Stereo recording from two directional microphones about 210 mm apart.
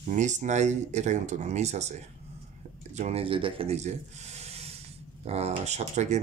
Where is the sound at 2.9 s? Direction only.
30° right (ahead or behind).